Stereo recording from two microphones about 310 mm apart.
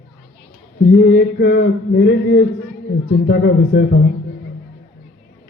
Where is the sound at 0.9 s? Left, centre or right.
Left.